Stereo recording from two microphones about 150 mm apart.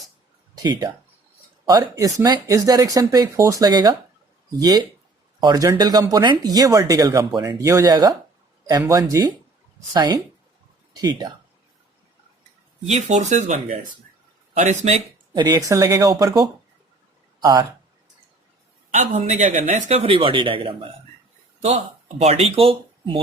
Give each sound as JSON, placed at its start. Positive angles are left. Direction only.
{"t": 0.5, "sound": "speech", "side_deg": -25}
{"t": 12.8, "sound": "speech", "side_deg": -50}
{"t": 15.4, "sound": "speech", "side_deg": -25}
{"t": 18.9, "sound": "speech", "side_deg": -50}
{"t": 20.0, "sound": "speech", "side_deg": -40}
{"t": 22.2, "sound": "speech", "side_deg": -40}